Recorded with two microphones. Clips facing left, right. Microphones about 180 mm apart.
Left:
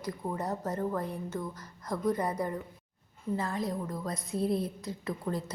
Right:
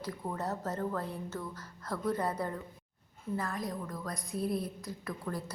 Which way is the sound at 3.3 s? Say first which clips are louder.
Left 3 dB; 25° left (ahead or behind).